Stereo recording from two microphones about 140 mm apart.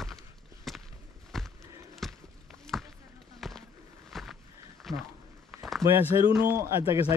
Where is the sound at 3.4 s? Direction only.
Centre (ahead or behind).